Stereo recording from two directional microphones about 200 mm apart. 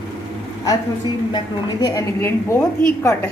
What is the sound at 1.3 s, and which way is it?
A woman's voice, 20° left (ahead or behind).